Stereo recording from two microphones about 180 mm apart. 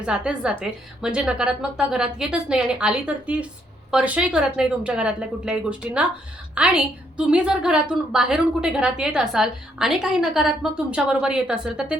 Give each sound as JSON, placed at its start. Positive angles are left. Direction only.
{"t": 0.0, "sound": "a woman's voice", "side_deg": -5}